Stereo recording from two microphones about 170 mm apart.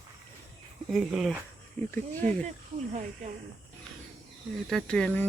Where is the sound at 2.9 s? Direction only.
45° right (ahead or behind).